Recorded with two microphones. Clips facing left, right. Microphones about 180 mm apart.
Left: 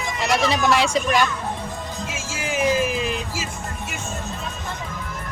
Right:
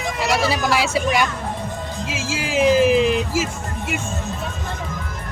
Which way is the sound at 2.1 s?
90° right.